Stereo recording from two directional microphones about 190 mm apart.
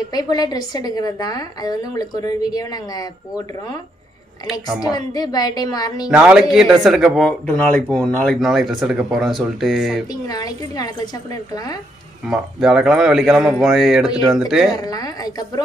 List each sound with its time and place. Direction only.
0.1 s a woman's voice: 20° left (ahead or behind)
4.5 s speech: centre (ahead or behind)
4.9 s a woman's voice: 20° left (ahead or behind)
6.0 s speech: 5° right (ahead or behind)
10.2 s a woman's voice: 20° left (ahead or behind)
12.3 s speech: centre (ahead or behind)
14.8 s a woman's voice: 20° left (ahead or behind)